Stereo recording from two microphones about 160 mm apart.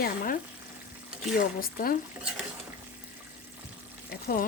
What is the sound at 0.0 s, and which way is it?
Speech, 60° left (ahead or behind).